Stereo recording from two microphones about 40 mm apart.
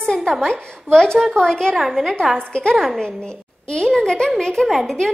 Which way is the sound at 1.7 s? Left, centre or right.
Centre.